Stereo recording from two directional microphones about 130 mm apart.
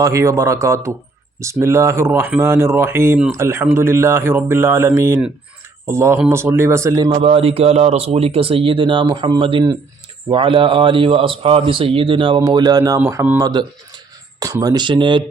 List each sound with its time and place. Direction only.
0.0 s speech: 25° right (ahead or behind)
7.1 s a man's voice: 50° right (ahead or behind)